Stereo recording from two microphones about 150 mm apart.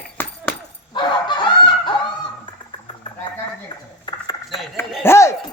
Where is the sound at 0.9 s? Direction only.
30° left (ahead or behind).